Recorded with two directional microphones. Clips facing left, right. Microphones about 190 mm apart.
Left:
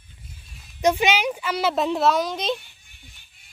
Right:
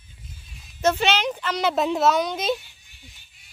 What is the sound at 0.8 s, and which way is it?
Speech, 10° left (ahead or behind).